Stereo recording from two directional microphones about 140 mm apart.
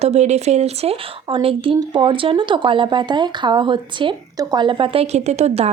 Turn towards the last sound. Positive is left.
turn(degrees=-45)  # may be behind; listen again after turning